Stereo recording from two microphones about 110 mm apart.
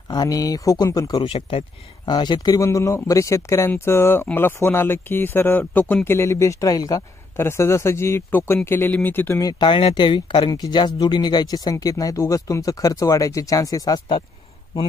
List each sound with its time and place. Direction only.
0.1 s speech: 35° left (ahead or behind)
1.2 s speech: 55° left (ahead or behind)
2.0 s speech: 40° left (ahead or behind); by 9.4 s 20° left (ahead or behind)
9.4 s speech: 35° left (ahead or behind)
9.7 s speech: 50° left (ahead or behind)